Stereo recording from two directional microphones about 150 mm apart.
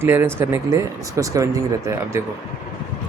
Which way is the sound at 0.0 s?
15° right (ahead or behind).